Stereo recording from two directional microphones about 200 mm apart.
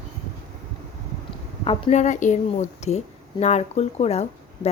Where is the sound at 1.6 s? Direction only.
30° left (ahead or behind).